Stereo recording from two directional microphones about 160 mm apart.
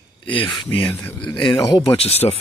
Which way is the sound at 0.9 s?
15° left (ahead or behind).